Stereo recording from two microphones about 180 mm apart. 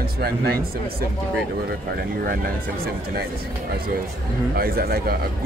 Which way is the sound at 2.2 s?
55° right (ahead or behind).